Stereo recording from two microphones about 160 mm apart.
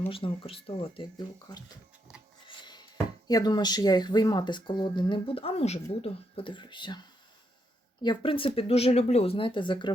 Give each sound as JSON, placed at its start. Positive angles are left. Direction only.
{"t": 0.1, "sound": "speech", "side_deg": 35}
{"t": 2.5, "sound": "music", "side_deg": 30}
{"t": 3.2, "sound": "speech", "side_deg": 25}
{"t": 8.0, "sound": "speech", "side_deg": 30}